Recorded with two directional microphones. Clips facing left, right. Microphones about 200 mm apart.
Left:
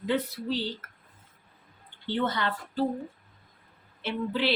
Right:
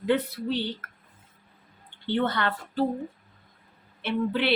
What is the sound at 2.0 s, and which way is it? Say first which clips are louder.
Speech: right 3 dB; 60° right (ahead or behind).